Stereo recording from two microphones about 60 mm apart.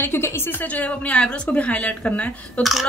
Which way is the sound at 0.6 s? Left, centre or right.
Left.